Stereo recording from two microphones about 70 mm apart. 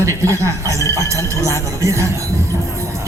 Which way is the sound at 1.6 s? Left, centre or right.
Right.